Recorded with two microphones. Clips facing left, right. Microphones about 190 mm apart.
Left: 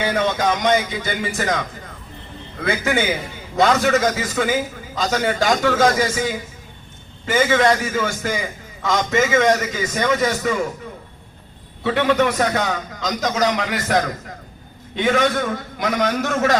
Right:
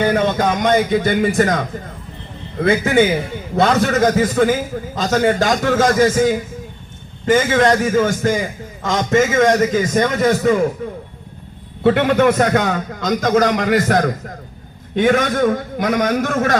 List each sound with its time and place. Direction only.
0.0 s a man's voice: 50° right (ahead or behind)